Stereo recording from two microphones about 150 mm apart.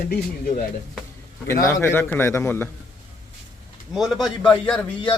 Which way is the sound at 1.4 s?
15° left (ahead or behind).